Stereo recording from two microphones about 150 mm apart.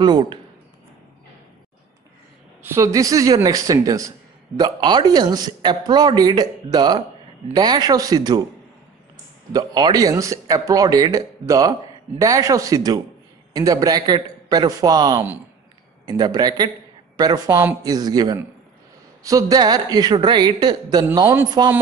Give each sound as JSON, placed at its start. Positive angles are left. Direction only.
{"t": 0.0, "sound": "speech", "side_deg": -30}
{"t": 2.6, "sound": "a man's voice", "side_deg": -20}
{"t": 9.5, "sound": "a man's voice", "side_deg": -25}